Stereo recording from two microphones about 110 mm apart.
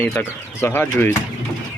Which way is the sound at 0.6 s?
20° left (ahead or behind).